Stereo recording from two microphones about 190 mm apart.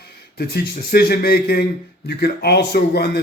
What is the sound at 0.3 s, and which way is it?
A man's voice, 55° left (ahead or behind).